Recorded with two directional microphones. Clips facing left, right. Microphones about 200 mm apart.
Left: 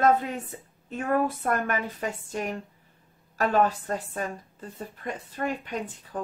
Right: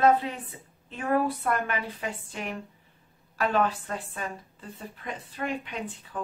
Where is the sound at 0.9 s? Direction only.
45° left (ahead or behind).